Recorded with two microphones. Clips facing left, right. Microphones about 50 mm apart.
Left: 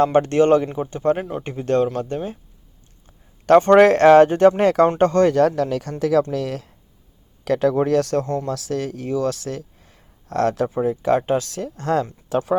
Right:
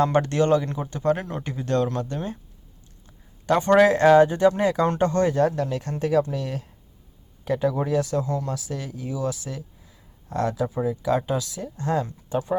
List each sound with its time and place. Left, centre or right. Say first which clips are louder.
0.0 s speech: left 5 dB; left
3.4 s speech: left 6 dB; left
5.3 s speech: left 5 dB; left
7.4 s speech: left 6 dB; left
8.4 s speech: left 6 dB; left
10.8 s speech: left 4 dB; left
11.5 s speech: left 4 dB; left